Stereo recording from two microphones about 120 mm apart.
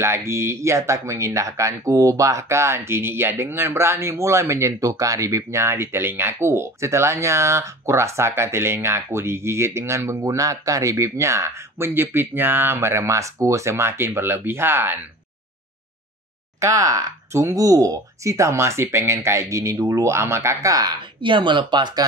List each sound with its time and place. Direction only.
0.0 s speech: 20° right (ahead or behind)
16.5 s speech: 30° right (ahead or behind)
21.2 s speech: 45° right (ahead or behind)